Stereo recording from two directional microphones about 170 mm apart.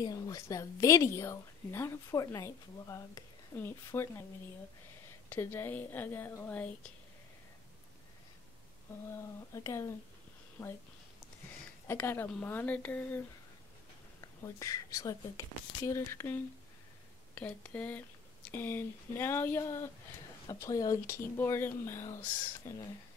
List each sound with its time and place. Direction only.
0.0 s a woman's voice: 20° left (ahead or behind)
5.3 s a woman's voice: 15° left (ahead or behind)
9.1 s a woman's voice: 15° left (ahead or behind)
11.9 s a woman's voice: 15° left (ahead or behind)
14.2 s speech: 20° left (ahead or behind)
17.4 s a woman's voice: 10° left (ahead or behind)